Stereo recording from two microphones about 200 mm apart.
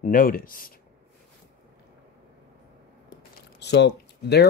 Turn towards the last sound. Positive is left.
turn(degrees=55)  # may be behind; listen again after turning